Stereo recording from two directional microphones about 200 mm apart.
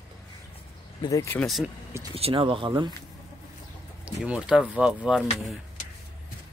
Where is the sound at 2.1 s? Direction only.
30° right (ahead or behind).